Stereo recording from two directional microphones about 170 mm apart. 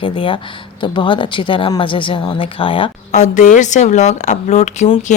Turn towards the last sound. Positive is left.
turn(degrees=45)  # may be behind; listen again after turning